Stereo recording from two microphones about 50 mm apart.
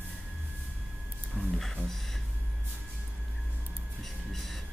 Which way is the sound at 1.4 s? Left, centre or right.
Centre.